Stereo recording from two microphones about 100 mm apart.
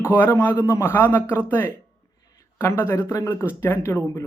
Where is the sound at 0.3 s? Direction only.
30° left (ahead or behind).